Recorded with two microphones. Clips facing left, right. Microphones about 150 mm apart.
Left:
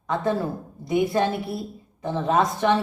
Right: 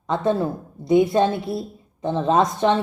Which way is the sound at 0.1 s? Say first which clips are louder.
Right 3 dB; 25° right (ahead or behind).